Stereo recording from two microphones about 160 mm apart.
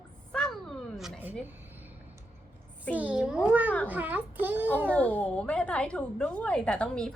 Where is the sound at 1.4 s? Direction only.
10° right (ahead or behind).